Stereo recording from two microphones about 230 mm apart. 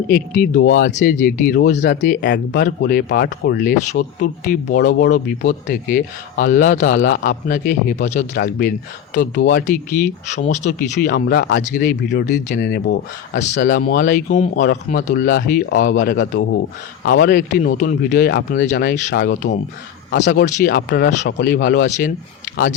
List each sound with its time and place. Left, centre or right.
0.1 s speech: left
11.1 s speech: left
13.4 s speech: left
17.1 s a man's voice: left
20.4 s speech: left
21.4 s speech: left